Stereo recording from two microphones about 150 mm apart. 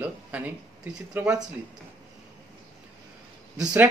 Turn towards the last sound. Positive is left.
turn(degrees=-10)  # may be behind; listen again after turning